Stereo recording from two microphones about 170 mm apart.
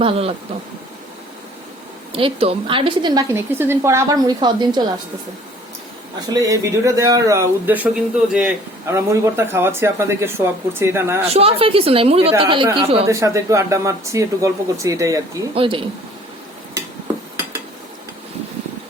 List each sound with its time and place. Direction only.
0.0 s a woman's voice: 35° right (ahead or behind)
2.1 s a woman's voice: 35° right (ahead or behind)
3.3 s a woman's voice: 15° right (ahead or behind)
6.2 s speech: 20° right (ahead or behind)
11.2 s a woman's voice: 35° right (ahead or behind)
13.1 s speech: 20° right (ahead or behind)
15.5 s a woman's voice: 30° right (ahead or behind)